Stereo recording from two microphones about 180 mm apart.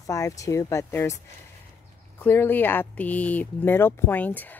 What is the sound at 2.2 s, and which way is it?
Speech, 10° left (ahead or behind).